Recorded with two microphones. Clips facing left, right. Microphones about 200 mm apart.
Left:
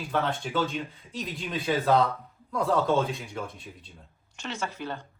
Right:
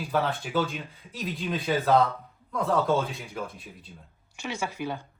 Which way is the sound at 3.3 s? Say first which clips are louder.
Even; centre (ahead or behind).